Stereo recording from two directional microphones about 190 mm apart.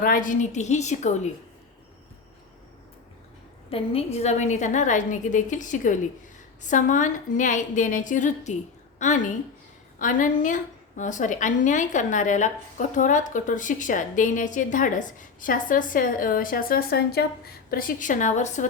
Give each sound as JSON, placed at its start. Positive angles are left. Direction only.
{"t": 0.0, "sound": "a woman's voice", "side_deg": 45}
{"t": 3.7, "sound": "a woman's voice", "side_deg": 30}